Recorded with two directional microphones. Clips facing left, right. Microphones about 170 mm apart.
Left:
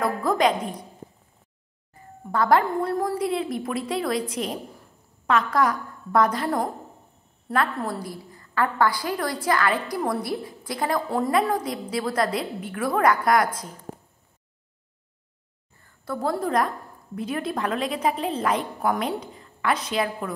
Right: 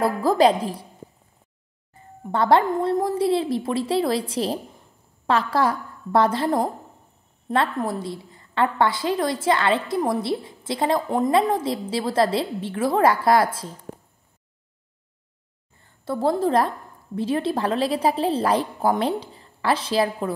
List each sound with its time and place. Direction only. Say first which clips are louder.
0.0 s a woman's voice: right 4 dB; 30° right (ahead or behind)
2.3 s a woman's voice: right 2 dB; 25° right (ahead or behind)
15.8 s a woman's voice: right 5 dB; 25° right (ahead or behind)